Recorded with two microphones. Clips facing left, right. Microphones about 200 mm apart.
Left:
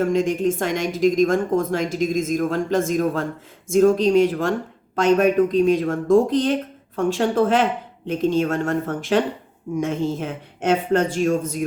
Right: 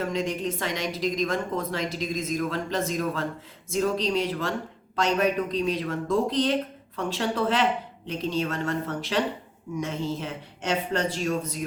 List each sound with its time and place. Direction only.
0.0 s speech: 50° left (ahead or behind)